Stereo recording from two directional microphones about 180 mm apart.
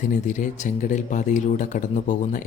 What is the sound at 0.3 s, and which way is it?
Speech, 45° left (ahead or behind).